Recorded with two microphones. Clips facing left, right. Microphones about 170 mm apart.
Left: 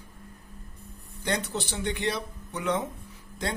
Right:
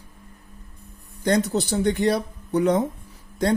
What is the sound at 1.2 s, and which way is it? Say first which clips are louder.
Speech: right 9 dB; 40° right (ahead or behind).